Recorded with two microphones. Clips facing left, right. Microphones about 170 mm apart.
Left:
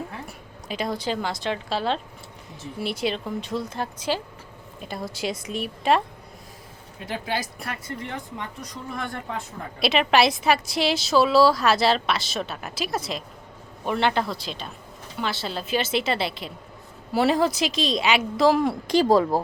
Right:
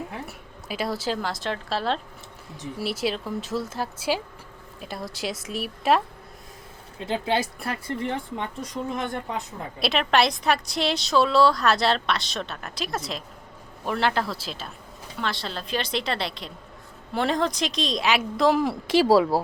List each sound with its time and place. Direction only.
0.3 s a woman's voice: 5° right (ahead or behind)
7.0 s speech: 25° right (ahead or behind)
9.8 s a woman's voice: centre (ahead or behind)